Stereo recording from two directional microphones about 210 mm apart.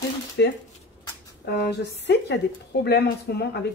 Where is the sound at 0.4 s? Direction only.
55° left (ahead or behind).